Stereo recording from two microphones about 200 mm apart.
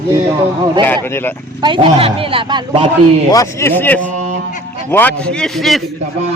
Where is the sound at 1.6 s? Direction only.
25° right (ahead or behind).